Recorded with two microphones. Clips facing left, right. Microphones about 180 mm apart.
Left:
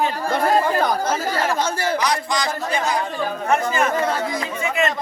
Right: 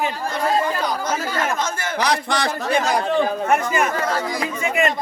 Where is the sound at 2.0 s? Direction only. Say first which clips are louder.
Right 1 dB; 65° right (ahead or behind).